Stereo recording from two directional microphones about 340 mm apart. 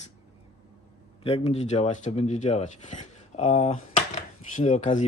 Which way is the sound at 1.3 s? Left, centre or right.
Centre.